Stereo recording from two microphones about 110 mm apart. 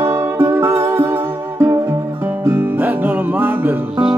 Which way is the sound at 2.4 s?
20° right (ahead or behind).